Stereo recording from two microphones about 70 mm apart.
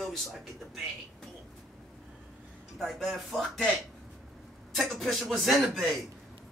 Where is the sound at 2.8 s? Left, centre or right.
Centre.